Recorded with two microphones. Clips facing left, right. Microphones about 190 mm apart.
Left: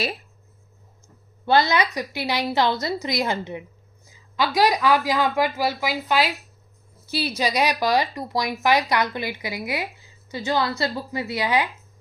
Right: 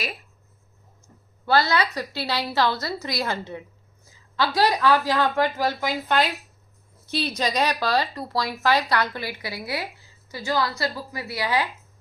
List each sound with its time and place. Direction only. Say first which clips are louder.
1.5 s speech: left 2 dB; 20° left (ahead or behind)